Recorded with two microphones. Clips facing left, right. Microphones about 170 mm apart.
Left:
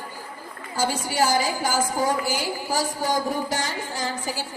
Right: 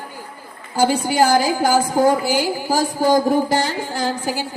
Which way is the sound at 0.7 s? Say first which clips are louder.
Right 8 dB; 65° right (ahead or behind).